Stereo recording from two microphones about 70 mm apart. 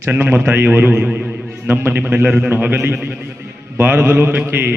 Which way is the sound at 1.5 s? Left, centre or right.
Right.